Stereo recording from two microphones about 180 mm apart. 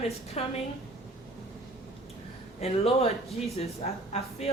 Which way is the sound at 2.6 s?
35° left (ahead or behind).